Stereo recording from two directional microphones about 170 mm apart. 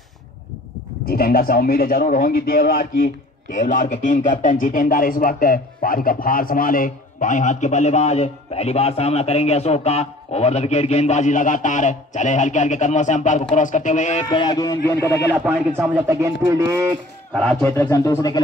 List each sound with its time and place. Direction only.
1.0 s a man's voice: 60° left (ahead or behind); by 14.2 s 45° left (ahead or behind)
14.3 s speech: 25° left (ahead or behind)
16.1 s speech: 20° right (ahead or behind)
17.3 s a man's voice: 5° left (ahead or behind)